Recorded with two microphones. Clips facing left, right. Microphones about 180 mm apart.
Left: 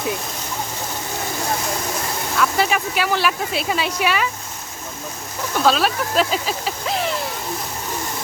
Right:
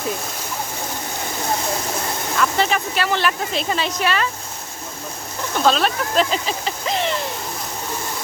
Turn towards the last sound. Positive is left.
turn(degrees=5)  # may be behind; listen again after turning